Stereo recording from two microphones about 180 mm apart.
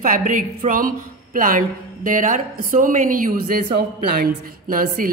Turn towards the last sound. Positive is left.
turn(degrees=-50)  # may be behind; listen again after turning